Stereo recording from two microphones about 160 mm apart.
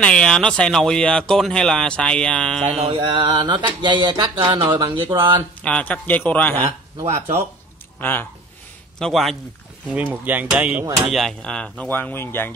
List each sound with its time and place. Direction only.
0.0 s speech: 5° left (ahead or behind)
2.6 s speech: 35° right (ahead or behind)
5.6 s speech: 5° left (ahead or behind)
8.0 s speech: 15° left (ahead or behind)
9.0 s speech: centre (ahead or behind)
9.8 s hammer: 10° right (ahead or behind)
11.1 s speech: centre (ahead or behind)